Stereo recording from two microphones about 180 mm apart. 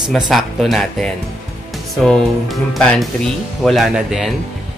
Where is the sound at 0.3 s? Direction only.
Centre (ahead or behind).